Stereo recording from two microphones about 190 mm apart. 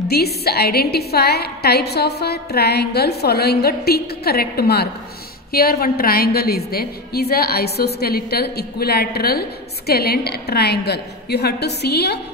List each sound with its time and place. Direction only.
0.1 s a woman's voice: 55° left (ahead or behind)